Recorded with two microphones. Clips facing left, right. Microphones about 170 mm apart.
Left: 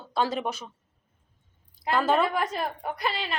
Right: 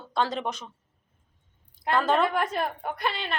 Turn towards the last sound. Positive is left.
turn(degrees=0)  # may be behind; listen again after turning